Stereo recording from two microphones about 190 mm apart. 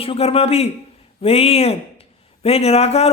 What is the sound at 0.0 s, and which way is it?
Speech, 30° left (ahead or behind).